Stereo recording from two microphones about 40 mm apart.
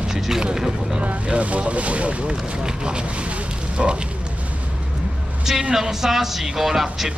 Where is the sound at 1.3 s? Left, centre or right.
Right.